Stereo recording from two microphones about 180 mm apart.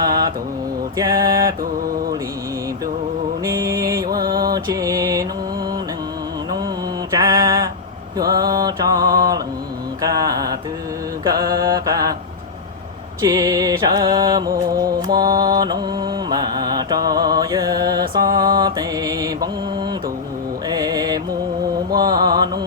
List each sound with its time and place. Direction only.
0.0 s mantra: 20° right (ahead or behind)
3.4 s mantra: 15° right (ahead or behind)
7.1 s mantra: 20° right (ahead or behind)
13.2 s music: 20° right (ahead or behind)
21.8 s mantra: 20° right (ahead or behind)